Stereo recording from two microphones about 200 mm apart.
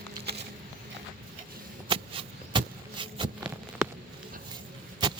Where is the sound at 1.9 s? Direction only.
25° right (ahead or behind).